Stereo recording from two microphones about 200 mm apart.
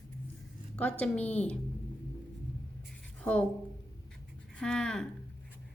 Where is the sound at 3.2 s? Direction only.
5° left (ahead or behind).